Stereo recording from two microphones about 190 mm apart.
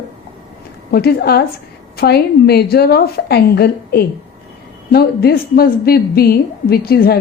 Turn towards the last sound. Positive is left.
turn(degrees=55)  # may be behind; listen again after turning